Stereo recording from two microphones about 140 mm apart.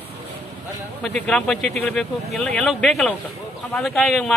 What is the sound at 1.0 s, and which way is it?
A man's voice, 5° left (ahead or behind).